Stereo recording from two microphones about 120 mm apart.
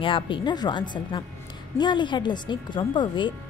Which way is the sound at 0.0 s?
45° left (ahead or behind).